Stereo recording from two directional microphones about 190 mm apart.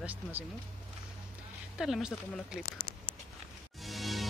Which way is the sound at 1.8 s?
5° right (ahead or behind).